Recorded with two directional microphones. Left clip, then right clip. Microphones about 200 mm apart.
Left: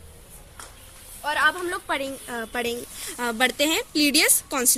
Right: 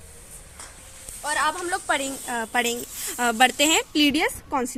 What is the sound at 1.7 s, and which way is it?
Speech, 60° right (ahead or behind).